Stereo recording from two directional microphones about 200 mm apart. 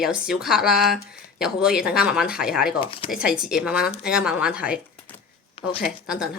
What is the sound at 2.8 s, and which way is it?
Speech, 25° left (ahead or behind).